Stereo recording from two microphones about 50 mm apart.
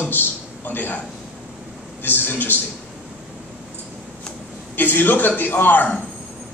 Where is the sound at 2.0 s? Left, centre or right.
Left.